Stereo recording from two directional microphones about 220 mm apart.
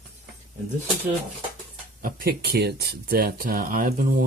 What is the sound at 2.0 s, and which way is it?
Speech, 40° right (ahead or behind).